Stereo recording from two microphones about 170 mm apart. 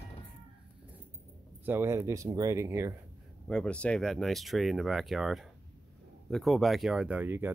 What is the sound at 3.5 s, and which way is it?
Speech, 5° left (ahead or behind).